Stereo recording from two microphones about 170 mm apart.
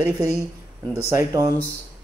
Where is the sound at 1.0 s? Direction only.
15° right (ahead or behind).